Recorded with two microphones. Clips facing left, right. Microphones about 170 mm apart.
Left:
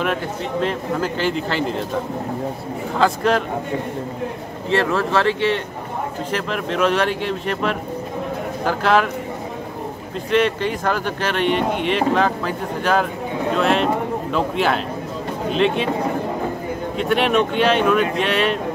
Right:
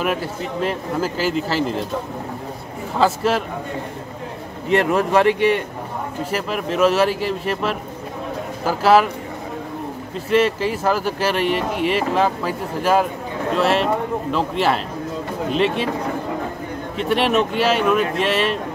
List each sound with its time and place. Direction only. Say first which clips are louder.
0.0 s speech: even; 5° right (ahead or behind)
3.0 s speech: even; 5° right (ahead or behind)
4.6 s speech: right 2 dB; 15° right (ahead or behind)
10.3 s speech: right 1 dB; 5° right (ahead or behind)
16.9 s speech: even; centre (ahead or behind)